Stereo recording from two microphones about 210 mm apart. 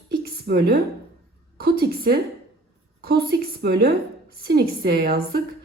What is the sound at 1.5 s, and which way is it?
A woman's voice, 45° right (ahead or behind).